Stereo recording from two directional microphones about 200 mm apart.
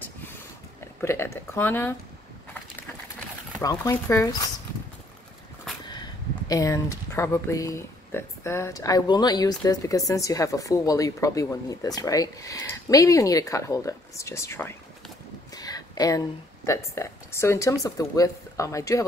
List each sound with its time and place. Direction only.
1.0 s speech: 15° left (ahead or behind)
3.5 s speech: 15° left (ahead or behind)
5.9 s speech: 20° left (ahead or behind)